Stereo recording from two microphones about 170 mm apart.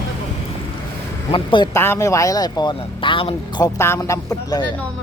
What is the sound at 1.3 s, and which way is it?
Speech, 30° left (ahead or behind).